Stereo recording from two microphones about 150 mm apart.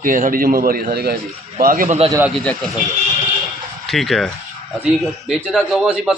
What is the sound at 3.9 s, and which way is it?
A man's voice, centre (ahead or behind).